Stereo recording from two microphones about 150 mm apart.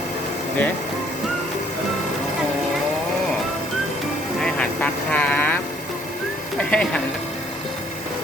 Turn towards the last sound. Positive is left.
turn(degrees=5)  # may be behind; listen again after turning